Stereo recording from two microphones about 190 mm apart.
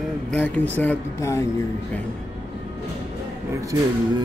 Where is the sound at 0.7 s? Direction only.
10° left (ahead or behind).